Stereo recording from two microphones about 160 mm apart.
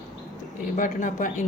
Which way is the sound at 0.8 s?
55° left (ahead or behind).